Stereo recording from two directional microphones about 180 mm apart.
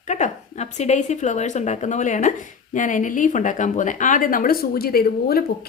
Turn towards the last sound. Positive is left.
turn(degrees=55)  # may be behind; listen again after turning